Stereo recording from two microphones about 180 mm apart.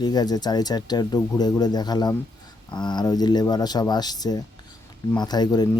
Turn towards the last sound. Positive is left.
turn(degrees=20)  # may be behind; listen again after turning